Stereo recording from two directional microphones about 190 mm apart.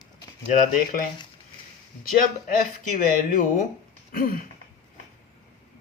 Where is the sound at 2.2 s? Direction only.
45° left (ahead or behind).